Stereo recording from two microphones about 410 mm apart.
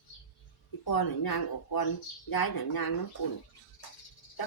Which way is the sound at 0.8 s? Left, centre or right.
Left.